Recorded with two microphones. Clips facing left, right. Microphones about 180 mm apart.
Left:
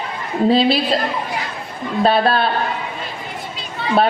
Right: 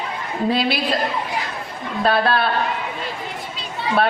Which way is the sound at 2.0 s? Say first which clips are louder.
Left 2 dB; 30° left (ahead or behind).